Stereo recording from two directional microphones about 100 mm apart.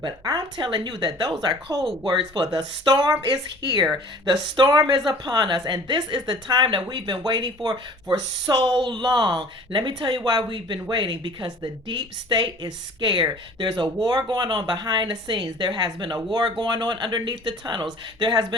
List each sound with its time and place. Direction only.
0.0 s speech: 45° right (ahead or behind)